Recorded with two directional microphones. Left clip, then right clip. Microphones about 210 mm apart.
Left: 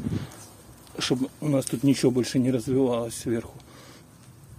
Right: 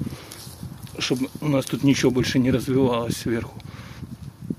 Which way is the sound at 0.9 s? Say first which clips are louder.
Right 2 dB; 10° left (ahead or behind).